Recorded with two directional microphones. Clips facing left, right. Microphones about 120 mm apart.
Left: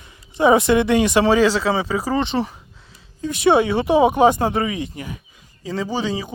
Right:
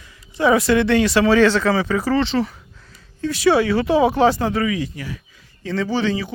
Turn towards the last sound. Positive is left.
turn(degrees=15)  # may be behind; listen again after turning